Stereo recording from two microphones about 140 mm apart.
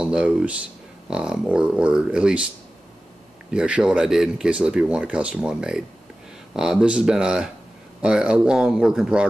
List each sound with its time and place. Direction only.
0.0 s speech: 10° right (ahead or behind)
3.5 s speech: 5° right (ahead or behind)